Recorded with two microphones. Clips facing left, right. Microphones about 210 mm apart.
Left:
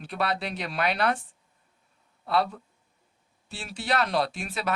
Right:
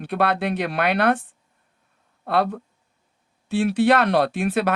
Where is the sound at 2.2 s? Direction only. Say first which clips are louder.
Right 4 dB; 55° right (ahead or behind).